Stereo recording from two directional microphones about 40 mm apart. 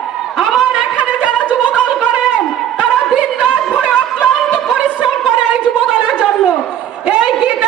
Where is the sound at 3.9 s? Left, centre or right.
Left.